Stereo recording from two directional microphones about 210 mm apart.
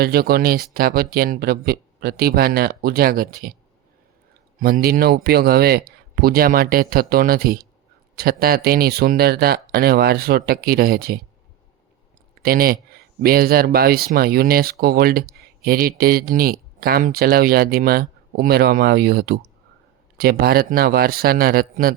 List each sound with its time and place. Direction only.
0.0 s speech: 45° right (ahead or behind)
4.6 s speech: 45° right (ahead or behind)
12.4 s speech: 45° right (ahead or behind)
20.4 s speech: 45° right (ahead or behind)